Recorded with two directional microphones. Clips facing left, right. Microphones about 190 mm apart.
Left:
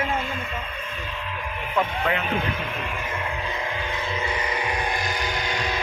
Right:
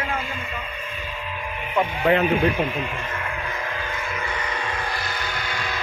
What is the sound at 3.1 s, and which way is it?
Vehicle, 20° left (ahead or behind).